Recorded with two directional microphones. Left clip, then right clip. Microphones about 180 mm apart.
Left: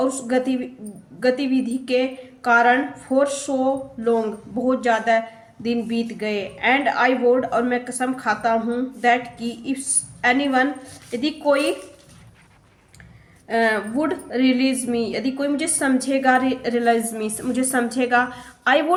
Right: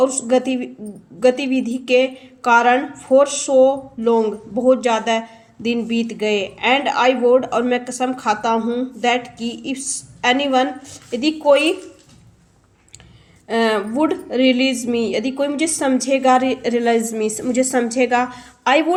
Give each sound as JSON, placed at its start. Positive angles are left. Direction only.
{"t": 0.0, "sound": "speech", "side_deg": -30}
{"t": 13.5, "sound": "a woman's voice", "side_deg": -40}